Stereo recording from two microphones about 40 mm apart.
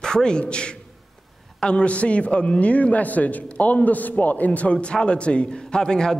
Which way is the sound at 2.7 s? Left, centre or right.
Left.